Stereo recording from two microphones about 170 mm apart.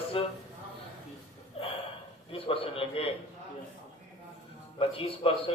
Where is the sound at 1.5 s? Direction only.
35° left (ahead or behind).